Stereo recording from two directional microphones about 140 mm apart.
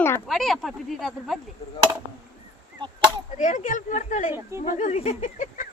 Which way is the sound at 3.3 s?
65° left (ahead or behind).